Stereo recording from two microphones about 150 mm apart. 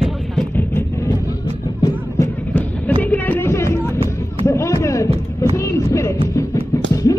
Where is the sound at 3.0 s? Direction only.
10° left (ahead or behind).